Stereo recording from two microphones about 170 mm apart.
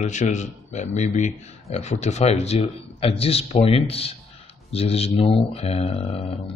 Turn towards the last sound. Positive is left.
turn(degrees=35)  # may be behind; listen again after turning